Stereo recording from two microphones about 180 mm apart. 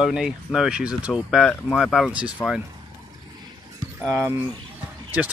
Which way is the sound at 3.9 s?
10° right (ahead or behind).